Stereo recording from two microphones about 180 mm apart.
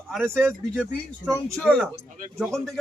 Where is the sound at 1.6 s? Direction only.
5° left (ahead or behind).